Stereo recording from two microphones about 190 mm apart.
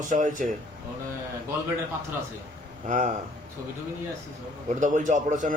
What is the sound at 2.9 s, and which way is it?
Speech, 45° right (ahead or behind).